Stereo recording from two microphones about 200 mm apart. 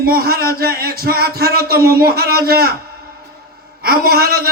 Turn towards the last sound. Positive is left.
turn(degrees=-50)  # may be behind; listen again after turning